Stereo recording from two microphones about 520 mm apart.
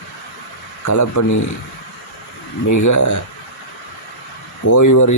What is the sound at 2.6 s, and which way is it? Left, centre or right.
Speech, left.